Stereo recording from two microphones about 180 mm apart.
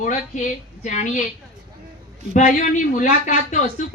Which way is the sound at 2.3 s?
45° left (ahead or behind).